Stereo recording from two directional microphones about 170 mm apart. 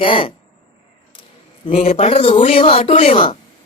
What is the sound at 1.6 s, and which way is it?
Speech, 40° left (ahead or behind).